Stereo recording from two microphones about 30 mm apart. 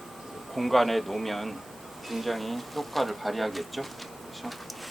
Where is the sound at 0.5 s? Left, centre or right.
Centre.